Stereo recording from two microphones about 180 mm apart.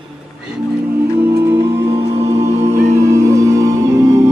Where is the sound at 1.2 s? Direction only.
15° right (ahead or behind).